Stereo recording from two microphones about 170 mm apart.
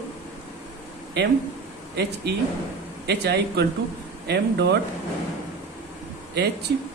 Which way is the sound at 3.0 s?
75° right (ahead or behind).